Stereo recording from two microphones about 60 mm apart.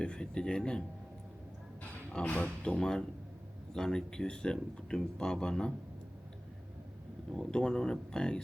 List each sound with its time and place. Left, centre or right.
0.0 s speech: centre
2.2 s speech: left
2.7 s speech: centre
7.3 s speech: centre